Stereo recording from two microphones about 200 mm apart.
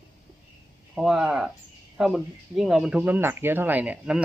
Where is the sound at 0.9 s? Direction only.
Centre (ahead or behind).